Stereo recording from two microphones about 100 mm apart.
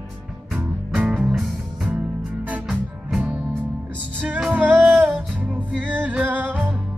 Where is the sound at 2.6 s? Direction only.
5° right (ahead or behind).